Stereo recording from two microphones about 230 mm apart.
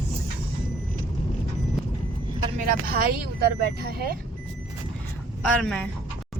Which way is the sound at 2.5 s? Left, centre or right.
Right.